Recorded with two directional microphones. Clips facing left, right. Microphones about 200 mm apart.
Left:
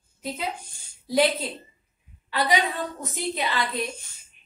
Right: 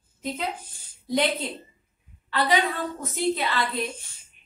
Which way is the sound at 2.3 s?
10° left (ahead or behind).